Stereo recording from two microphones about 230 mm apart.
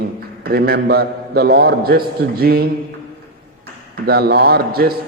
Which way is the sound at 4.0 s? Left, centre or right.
Right.